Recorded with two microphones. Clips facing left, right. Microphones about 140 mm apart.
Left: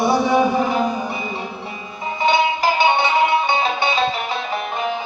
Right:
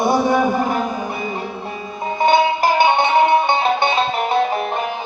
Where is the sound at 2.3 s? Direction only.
55° right (ahead or behind).